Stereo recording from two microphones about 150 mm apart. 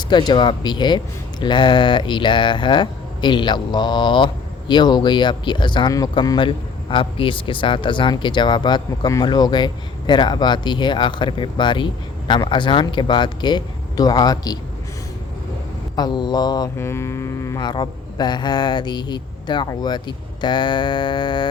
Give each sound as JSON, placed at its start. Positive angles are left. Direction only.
{"t": 0.1, "sound": "speech", "side_deg": 30}
{"t": 16.0, "sound": "speech", "side_deg": 30}
{"t": 16.7, "sound": "speech", "side_deg": 15}